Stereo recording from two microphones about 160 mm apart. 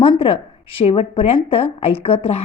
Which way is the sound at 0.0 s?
35° left (ahead or behind).